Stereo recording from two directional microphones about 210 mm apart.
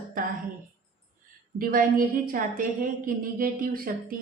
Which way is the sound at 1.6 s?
45° right (ahead or behind).